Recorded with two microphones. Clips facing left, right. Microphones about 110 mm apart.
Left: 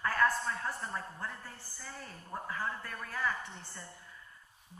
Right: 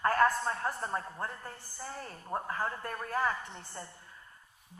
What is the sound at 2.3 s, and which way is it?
A woman's voice, 45° right (ahead or behind).